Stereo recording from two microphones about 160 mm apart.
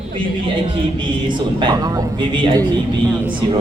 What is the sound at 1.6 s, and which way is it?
A man's voice, 25° right (ahead or behind).